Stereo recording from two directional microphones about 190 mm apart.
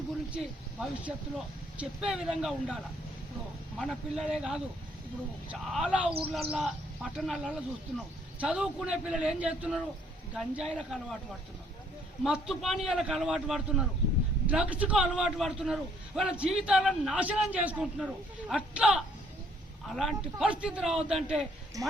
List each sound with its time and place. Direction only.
0.3 s a man's voice: 5° right (ahead or behind)
3.8 s a man's voice: 5° left (ahead or behind)
10.8 s a man's voice: 5° left (ahead or behind)
12.2 s a man's voice: 5° right (ahead or behind)
21.8 s speech: 20° right (ahead or behind)